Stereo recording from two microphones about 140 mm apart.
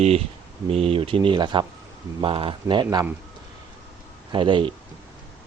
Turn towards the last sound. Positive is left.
turn(degrees=-35)  # may be behind; listen again after turning